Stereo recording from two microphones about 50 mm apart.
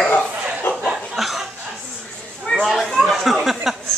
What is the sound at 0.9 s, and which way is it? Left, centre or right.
Chuckle, centre.